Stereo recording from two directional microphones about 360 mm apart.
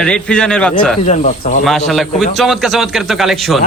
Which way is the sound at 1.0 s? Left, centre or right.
Left.